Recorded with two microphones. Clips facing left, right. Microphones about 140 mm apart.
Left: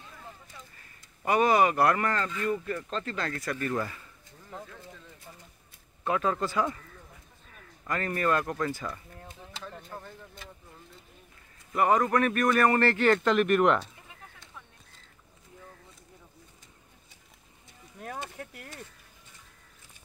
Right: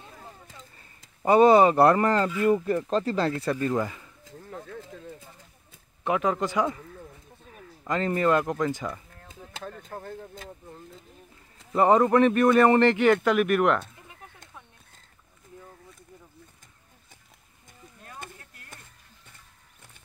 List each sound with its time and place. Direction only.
0.0 s a sound: 35° right (ahead or behind)
1.2 s speech: 30° right (ahead or behind)
2.2 s speech: 10° right (ahead or behind)
2.5 s speech: 35° right (ahead or behind)
6.0 s speech: 15° right (ahead or behind)
7.8 s speech: 20° right (ahead or behind)
9.5 s speech: 50° right (ahead or behind)
11.5 s speech: 30° right (ahead or behind); by 13.8 s 5° right (ahead or behind)
18.4 s a sound: 70° left (ahead or behind)